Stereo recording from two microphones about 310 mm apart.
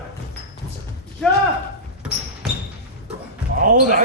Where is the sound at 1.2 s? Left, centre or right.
Centre.